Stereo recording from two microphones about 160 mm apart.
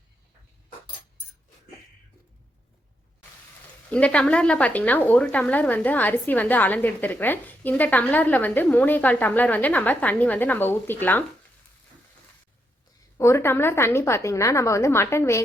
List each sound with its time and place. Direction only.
3.8 s a woman's voice: 5° left (ahead or behind)
13.1 s a woman's voice: 15° left (ahead or behind)